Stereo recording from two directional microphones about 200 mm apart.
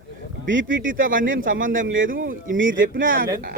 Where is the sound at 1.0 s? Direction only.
45° right (ahead or behind).